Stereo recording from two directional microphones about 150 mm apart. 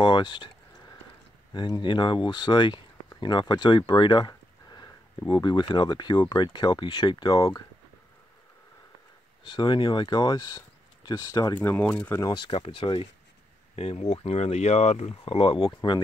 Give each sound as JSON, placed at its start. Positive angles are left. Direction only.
{"t": 0.0, "sound": "speech", "side_deg": 30}
{"t": 1.5, "sound": "speech", "side_deg": 30}
{"t": 9.4, "sound": "speech", "side_deg": 30}
{"t": 11.5, "sound": "speech", "side_deg": 10}
{"t": 12.4, "sound": "speech", "side_deg": 35}